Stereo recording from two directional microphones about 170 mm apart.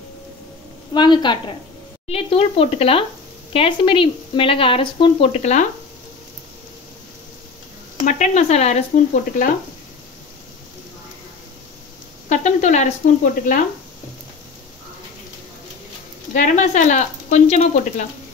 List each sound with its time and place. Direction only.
0.9 s a woman's voice: 25° left (ahead or behind); by 5.7 s 40° left (ahead or behind)
8.0 s speech: 45° left (ahead or behind)
12.3 s speech: 45° left (ahead or behind)
16.3 s speech: 45° left (ahead or behind)